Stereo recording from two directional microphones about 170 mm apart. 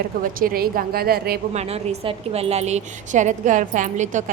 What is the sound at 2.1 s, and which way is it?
A woman's voice, 35° right (ahead or behind).